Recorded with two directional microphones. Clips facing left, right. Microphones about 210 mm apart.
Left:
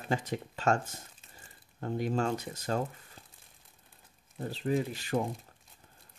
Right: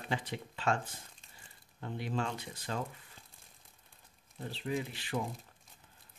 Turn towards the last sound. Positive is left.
turn(degrees=45)  # may be behind; listen again after turning